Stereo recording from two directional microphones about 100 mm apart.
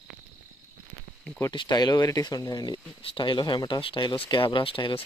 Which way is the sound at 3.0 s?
65° left (ahead or behind).